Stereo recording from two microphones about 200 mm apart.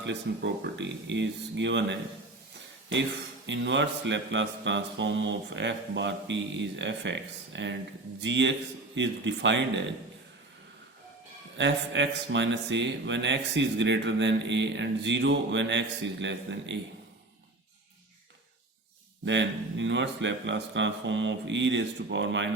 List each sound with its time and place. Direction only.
0.0 s mantra: 60° right (ahead or behind)
3.4 s mantra: 65° right (ahead or behind)
11.5 s mantra: 65° right (ahead or behind)
19.2 s mantra: 65° right (ahead or behind)